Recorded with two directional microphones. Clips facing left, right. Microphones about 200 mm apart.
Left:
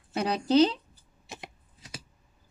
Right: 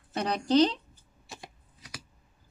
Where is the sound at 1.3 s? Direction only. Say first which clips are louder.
Left 2 dB; 25° left (ahead or behind).